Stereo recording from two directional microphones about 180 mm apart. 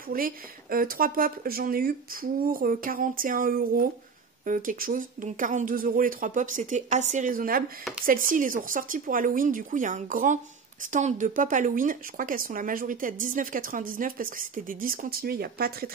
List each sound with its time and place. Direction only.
0.1 s speech: 50° right (ahead or behind)